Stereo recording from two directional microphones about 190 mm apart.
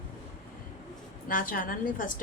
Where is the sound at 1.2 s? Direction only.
45° left (ahead or behind).